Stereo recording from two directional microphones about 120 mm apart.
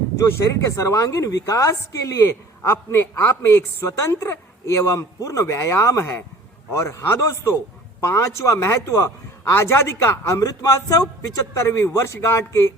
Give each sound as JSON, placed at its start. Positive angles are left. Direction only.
{"t": 0.3, "sound": "a man's voice", "side_deg": 25}